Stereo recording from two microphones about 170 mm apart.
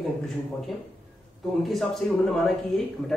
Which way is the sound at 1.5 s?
Centre (ahead or behind).